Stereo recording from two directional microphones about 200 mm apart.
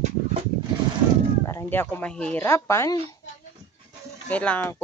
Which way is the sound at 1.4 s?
10° left (ahead or behind).